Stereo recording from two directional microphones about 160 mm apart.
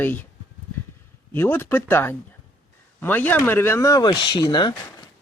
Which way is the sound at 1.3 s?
15° left (ahead or behind).